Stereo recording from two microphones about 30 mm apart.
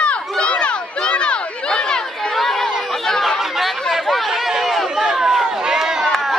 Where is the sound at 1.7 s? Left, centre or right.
Left.